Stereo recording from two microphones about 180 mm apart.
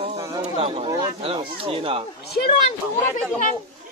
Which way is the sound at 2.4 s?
55° left (ahead or behind).